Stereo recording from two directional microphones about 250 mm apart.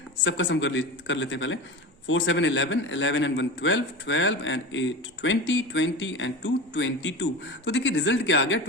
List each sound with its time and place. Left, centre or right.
0.3 s a man's voice: left